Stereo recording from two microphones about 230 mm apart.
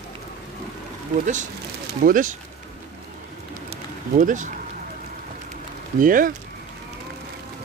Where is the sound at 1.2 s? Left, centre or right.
Right.